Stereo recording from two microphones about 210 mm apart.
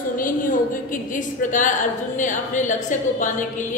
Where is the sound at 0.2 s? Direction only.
40° left (ahead or behind).